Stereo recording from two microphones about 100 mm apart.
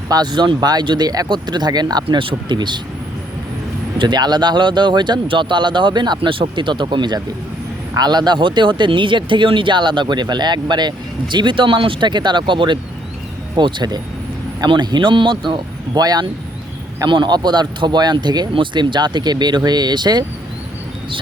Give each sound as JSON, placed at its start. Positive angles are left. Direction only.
{"t": 0.1, "sound": "speech", "side_deg": -45}
{"t": 3.9, "sound": "speech", "side_deg": -50}